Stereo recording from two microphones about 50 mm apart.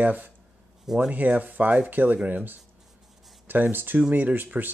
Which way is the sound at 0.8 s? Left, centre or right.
Centre.